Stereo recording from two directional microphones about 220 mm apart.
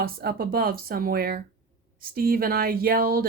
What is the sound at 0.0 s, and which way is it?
Speech, 45° right (ahead or behind).